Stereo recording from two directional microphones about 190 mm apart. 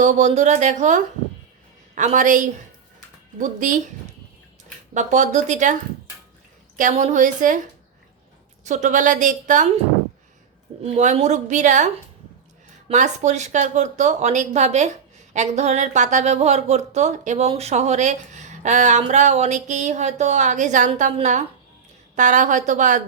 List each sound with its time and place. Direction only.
0.0 s a woman's voice: 40° right (ahead or behind)
4.9 s speech: 40° right (ahead or behind)
6.7 s a woman's voice: 40° right (ahead or behind)
10.8 s speech: 35° right (ahead or behind)
12.9 s speech: 40° right (ahead or behind)